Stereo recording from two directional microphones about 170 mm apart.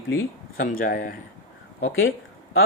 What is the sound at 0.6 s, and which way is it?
Speech, 55° left (ahead or behind).